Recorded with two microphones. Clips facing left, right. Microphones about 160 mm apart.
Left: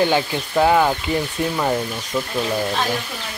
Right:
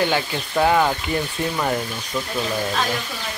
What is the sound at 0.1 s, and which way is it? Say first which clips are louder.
Speech: left 3 dB; 10° left (ahead or behind).